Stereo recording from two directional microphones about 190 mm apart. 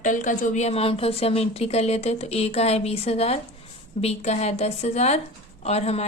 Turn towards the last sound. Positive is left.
turn(degrees=35)  # may be behind; listen again after turning